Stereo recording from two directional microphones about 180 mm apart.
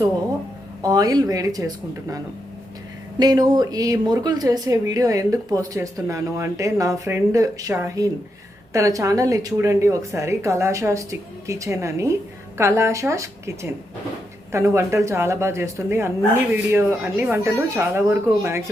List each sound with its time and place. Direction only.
0.8 s speech: 20° right (ahead or behind)